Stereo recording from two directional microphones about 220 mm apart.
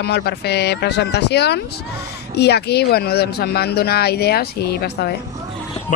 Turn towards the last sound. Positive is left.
turn(degrees=45)  # may be behind; listen again after turning